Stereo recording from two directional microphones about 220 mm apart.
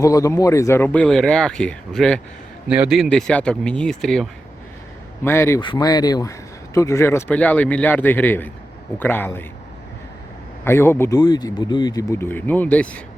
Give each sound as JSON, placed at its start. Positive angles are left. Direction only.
{"t": 0.0, "sound": "speech", "side_deg": 15}
{"t": 10.6, "sound": "speech", "side_deg": 10}